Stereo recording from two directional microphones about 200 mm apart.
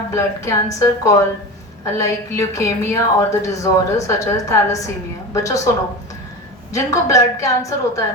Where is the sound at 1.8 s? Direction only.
15° left (ahead or behind).